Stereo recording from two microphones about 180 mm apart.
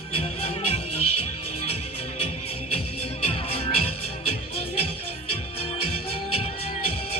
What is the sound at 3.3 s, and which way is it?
Music, 35° left (ahead or behind).